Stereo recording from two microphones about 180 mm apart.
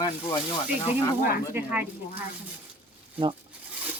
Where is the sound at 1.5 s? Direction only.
10° right (ahead or behind).